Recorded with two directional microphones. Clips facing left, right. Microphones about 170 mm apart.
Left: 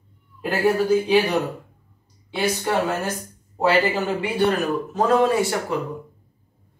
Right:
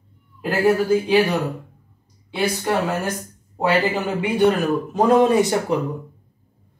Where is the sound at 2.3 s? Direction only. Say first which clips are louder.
Right 1 dB; 10° right (ahead or behind).